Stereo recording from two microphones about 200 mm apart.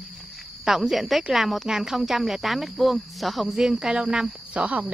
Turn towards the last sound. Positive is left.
turn(degrees=-5)  # may be behind; listen again after turning